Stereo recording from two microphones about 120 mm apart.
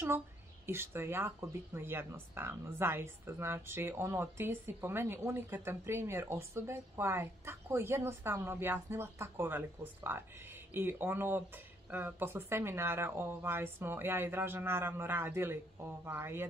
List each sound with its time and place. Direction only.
0.7 s speech: 20° right (ahead or behind)